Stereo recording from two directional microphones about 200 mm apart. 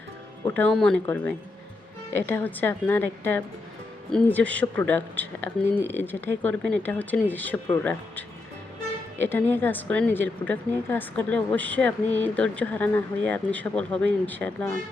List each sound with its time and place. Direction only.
0.4 s a woman's voice: 10° left (ahead or behind)
9.2 s a woman's voice: 10° left (ahead or behind)